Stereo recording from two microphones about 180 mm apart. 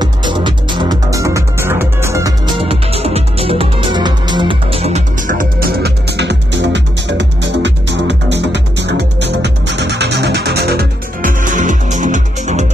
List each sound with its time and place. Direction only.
0.0 s music: 25° right (ahead or behind)
2.6 s music: 35° right (ahead or behind)